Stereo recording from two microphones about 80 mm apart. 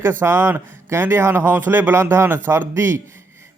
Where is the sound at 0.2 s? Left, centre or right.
Right.